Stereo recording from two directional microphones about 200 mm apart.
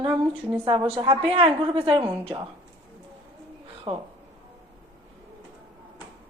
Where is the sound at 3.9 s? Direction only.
25° right (ahead or behind).